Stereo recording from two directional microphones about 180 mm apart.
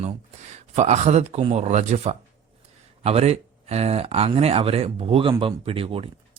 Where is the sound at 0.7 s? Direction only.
40° right (ahead or behind).